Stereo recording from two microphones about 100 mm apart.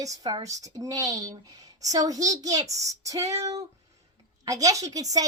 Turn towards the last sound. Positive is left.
turn(degrees=-35)  # may be behind; listen again after turning